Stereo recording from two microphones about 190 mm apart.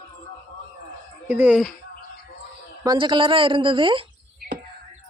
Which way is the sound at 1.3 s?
10° right (ahead or behind).